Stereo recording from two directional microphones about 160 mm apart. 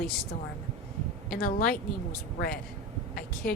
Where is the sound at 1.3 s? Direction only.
65° left (ahead or behind).